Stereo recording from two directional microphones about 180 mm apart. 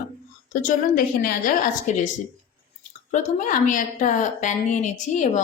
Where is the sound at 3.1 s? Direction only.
45° left (ahead or behind).